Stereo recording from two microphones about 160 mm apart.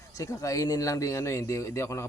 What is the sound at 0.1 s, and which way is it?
Speech, 20° left (ahead or behind).